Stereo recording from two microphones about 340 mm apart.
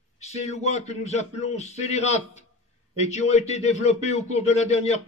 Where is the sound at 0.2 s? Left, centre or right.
Centre.